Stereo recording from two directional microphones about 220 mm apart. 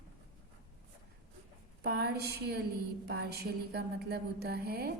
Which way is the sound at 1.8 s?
45° right (ahead or behind).